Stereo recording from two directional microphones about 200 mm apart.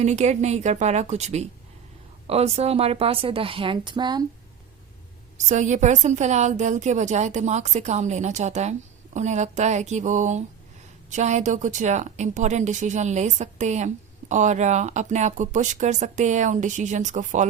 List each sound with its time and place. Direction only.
0.0 s a woman's voice: 35° right (ahead or behind)
5.5 s speech: 35° right (ahead or behind)